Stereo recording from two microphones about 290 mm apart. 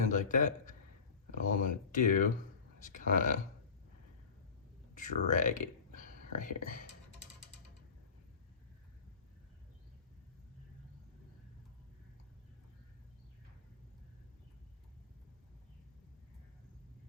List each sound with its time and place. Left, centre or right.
0.1 s a man's voice: left
4.9 s speech: left